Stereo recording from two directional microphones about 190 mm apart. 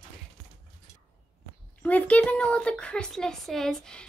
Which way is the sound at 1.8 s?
5° left (ahead or behind).